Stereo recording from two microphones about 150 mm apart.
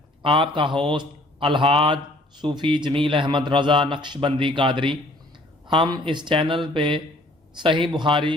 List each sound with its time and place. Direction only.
0.2 s speech: 35° right (ahead or behind)